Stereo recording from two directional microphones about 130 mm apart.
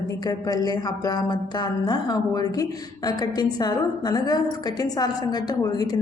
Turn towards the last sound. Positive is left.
turn(degrees=30)  # may be behind; listen again after turning